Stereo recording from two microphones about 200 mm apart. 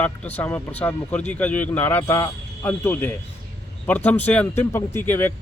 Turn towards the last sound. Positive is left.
turn(degrees=10)  # may be behind; listen again after turning